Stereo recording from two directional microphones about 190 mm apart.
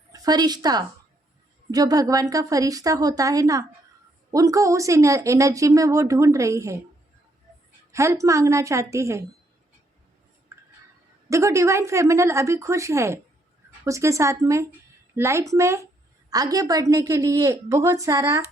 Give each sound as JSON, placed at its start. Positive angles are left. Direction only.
{"t": 0.1, "sound": "a woman's voice", "side_deg": -20}
{"t": 7.9, "sound": "a woman's voice", "side_deg": -15}
{"t": 10.5, "sound": "a sound", "side_deg": -15}
{"t": 11.3, "sound": "a woman's voice", "side_deg": -15}